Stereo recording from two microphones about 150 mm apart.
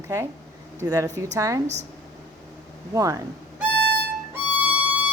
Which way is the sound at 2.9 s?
25° right (ahead or behind).